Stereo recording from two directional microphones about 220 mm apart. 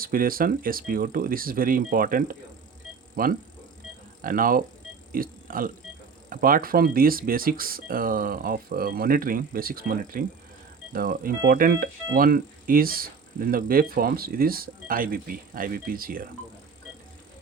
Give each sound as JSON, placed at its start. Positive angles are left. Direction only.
{"t": 0.0, "sound": "speech", "side_deg": -40}